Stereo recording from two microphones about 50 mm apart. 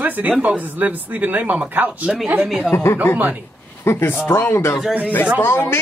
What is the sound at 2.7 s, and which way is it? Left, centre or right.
Speech, left.